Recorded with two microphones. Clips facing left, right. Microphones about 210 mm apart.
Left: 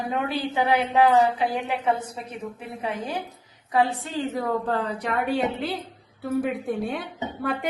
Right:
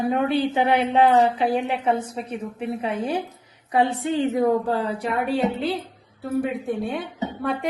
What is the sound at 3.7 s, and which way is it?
A woman's voice, 25° right (ahead or behind).